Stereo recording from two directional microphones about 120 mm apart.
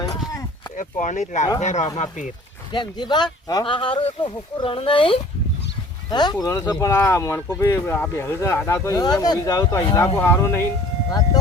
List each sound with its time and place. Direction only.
0.8 s speech: 90° left
2.0 s speech: 90° left
2.7 s speech: 40° left (ahead or behind)
6.1 s speech: 35° left (ahead or behind)